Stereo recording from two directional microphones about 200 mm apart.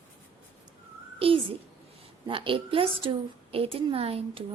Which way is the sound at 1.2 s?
25° right (ahead or behind).